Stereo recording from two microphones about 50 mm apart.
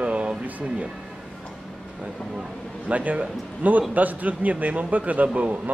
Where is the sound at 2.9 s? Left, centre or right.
Right.